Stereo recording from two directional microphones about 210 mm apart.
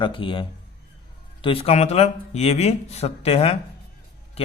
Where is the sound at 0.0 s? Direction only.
25° left (ahead or behind).